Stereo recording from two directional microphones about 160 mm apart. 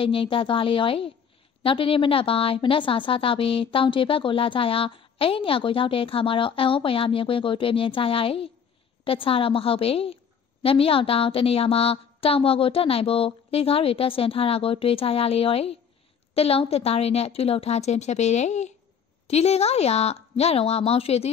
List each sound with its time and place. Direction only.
0.0 s a woman's voice: 35° left (ahead or behind)